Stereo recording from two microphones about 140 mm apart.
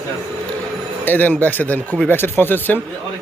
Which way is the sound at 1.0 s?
15° left (ahead or behind).